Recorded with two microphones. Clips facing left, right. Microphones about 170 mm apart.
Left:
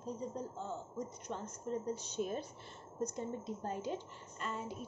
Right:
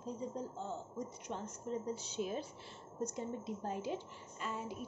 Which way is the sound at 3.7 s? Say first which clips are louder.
Even; 5° right (ahead or behind).